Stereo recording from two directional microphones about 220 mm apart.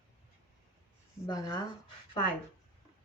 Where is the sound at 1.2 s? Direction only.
20° left (ahead or behind).